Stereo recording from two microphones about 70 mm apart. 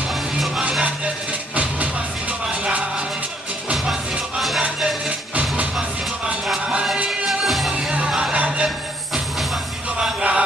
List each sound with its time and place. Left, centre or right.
1.5 s music: right
4.4 s music: centre
5.3 s music: centre
7.2 s music: centre
7.7 s music: centre
9.9 s music: centre